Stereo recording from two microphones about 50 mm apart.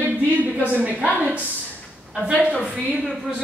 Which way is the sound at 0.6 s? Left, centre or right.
Right.